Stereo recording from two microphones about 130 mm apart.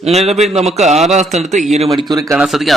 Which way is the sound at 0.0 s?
55° right (ahead or behind).